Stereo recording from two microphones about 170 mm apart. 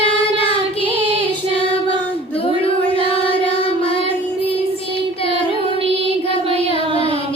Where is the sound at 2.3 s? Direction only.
35° left (ahead or behind).